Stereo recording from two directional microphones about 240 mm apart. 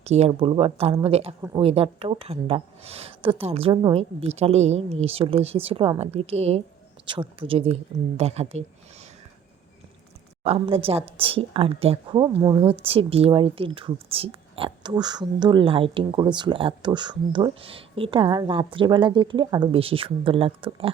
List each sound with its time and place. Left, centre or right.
0.0 s speech: right
10.4 s speech: right